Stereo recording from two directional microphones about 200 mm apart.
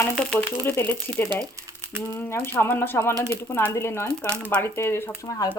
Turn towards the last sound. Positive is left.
turn(degrees=15)  # may be behind; listen again after turning